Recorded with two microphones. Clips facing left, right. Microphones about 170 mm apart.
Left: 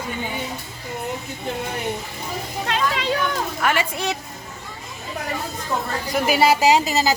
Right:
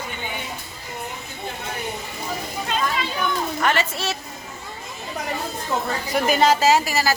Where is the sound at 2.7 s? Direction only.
80° left.